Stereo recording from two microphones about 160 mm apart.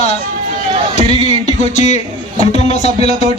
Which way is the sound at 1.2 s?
45° left (ahead or behind).